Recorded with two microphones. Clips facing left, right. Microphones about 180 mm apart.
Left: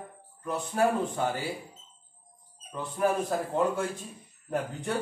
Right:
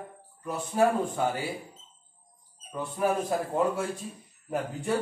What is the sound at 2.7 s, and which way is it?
Speech, 10° right (ahead or behind).